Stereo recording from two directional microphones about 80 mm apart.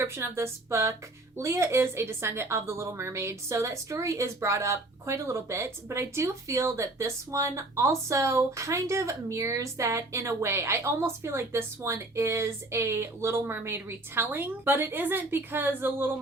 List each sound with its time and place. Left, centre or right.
0.0 s a woman's voice: right